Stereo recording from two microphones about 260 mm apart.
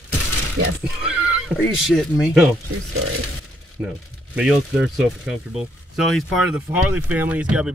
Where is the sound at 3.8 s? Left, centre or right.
Centre.